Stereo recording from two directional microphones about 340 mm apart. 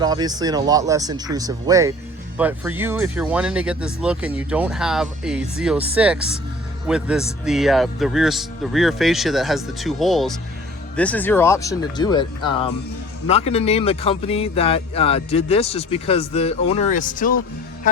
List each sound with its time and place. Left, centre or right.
0.0 s speech: centre; by 17.3 s left